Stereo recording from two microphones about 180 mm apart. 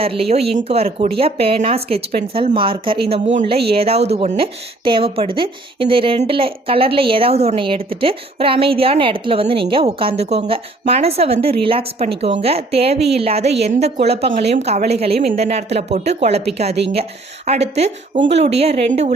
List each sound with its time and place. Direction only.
0.0 s speech: 30° right (ahead or behind)